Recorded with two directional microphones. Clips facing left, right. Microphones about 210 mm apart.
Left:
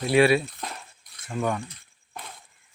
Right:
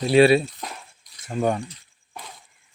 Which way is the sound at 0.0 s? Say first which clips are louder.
Right 4 dB; 30° right (ahead or behind).